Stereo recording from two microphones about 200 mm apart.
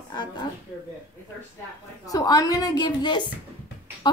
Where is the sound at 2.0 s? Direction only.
20° left (ahead or behind).